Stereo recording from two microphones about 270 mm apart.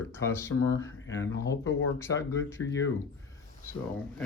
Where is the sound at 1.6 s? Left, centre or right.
Left.